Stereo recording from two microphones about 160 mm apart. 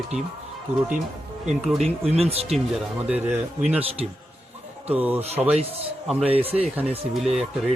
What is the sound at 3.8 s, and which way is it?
Speech, 35° right (ahead or behind).